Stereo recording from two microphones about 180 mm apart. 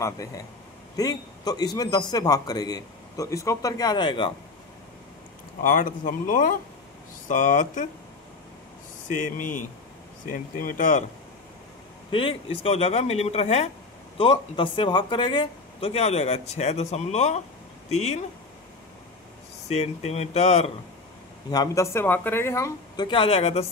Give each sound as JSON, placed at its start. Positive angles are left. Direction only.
{"t": 0.0, "sound": "a man's voice", "side_deg": 15}
{"t": 5.6, "sound": "speech", "side_deg": 45}
{"t": 9.0, "sound": "speech", "side_deg": 45}
{"t": 12.1, "sound": "speech", "side_deg": 30}
{"t": 19.7, "sound": "speech", "side_deg": 35}
{"t": 21.5, "sound": "speech", "side_deg": 20}
{"t": 23.0, "sound": "speech", "side_deg": 30}